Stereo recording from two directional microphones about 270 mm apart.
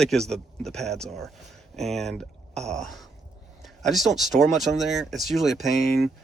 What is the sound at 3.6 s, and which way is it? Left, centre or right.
Speech, centre.